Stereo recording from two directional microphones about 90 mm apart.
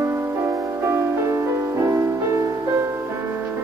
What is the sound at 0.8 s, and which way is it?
Music, 30° right (ahead or behind).